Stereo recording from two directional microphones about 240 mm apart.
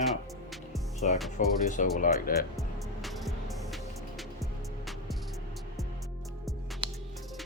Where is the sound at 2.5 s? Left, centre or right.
Centre.